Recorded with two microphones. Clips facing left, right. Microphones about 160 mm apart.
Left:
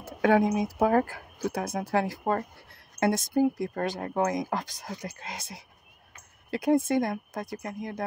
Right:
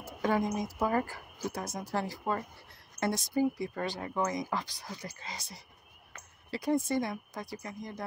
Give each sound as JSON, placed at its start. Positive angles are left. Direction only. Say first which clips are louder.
{"t": 0.0, "sound": "speech", "louder": "left 7 dB", "side_deg": 70}